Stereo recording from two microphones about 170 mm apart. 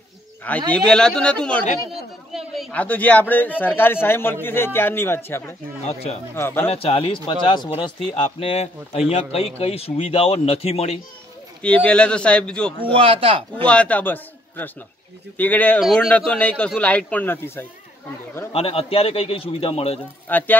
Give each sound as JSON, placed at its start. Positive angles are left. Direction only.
{"t": 0.7, "sound": "speech", "side_deg": 5}
{"t": 6.7, "sound": "speech", "side_deg": 35}
{"t": 11.6, "sound": "speech", "side_deg": 10}
{"t": 12.9, "sound": "speech", "side_deg": -35}
{"t": 13.7, "sound": "a man's voice", "side_deg": 10}
{"t": 18.5, "sound": "speech", "side_deg": 35}
{"t": 20.2, "sound": "speech", "side_deg": 10}